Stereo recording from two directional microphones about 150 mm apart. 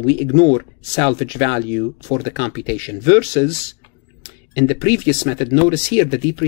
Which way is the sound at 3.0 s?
30° left (ahead or behind).